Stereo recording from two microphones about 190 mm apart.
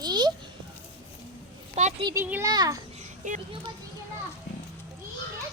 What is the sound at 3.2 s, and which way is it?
Speech, 40° right (ahead or behind).